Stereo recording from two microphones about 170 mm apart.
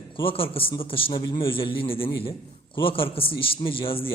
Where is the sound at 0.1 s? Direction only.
30° left (ahead or behind).